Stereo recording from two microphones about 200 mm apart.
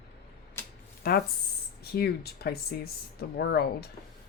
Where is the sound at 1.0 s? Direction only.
50° left (ahead or behind).